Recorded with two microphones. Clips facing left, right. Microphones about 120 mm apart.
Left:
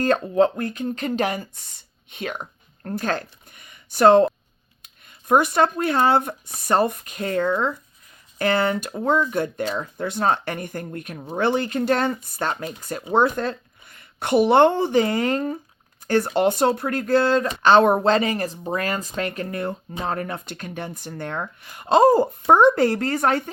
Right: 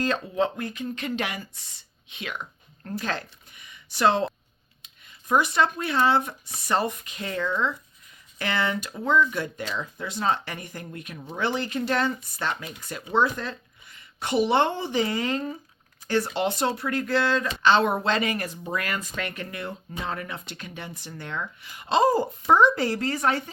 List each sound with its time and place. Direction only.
0.0 s speech: 50° left (ahead or behind)